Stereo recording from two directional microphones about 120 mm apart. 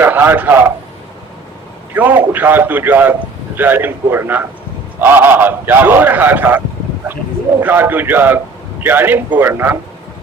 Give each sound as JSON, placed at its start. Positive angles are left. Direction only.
{"t": 0.0, "sound": "a man's voice", "side_deg": -20}
{"t": 1.9, "sound": "a man's voice", "side_deg": -15}
{"t": 7.6, "sound": "a man's voice", "side_deg": -15}